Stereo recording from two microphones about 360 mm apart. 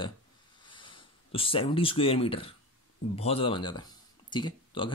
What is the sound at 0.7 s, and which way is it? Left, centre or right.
Speech, centre.